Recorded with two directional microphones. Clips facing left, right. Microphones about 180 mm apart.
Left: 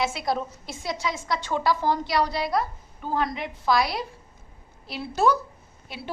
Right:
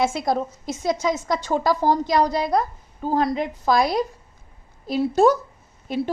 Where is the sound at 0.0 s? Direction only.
50° right (ahead or behind).